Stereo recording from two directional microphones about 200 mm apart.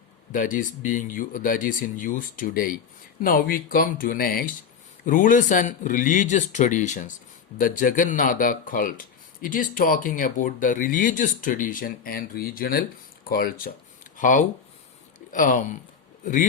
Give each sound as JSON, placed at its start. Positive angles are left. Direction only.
{"t": 0.3, "sound": "speech", "side_deg": 40}